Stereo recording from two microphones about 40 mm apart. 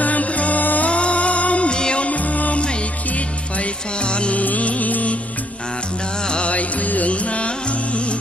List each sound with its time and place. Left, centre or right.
0.0 s music: left
0.8 s music: left
1.8 s music: left
2.0 s music: left
3.5 s music: left
4.4 s music: left
6.2 s music: left
6.5 s music: left